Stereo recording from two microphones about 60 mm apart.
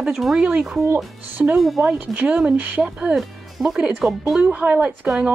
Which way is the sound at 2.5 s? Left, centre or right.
Right.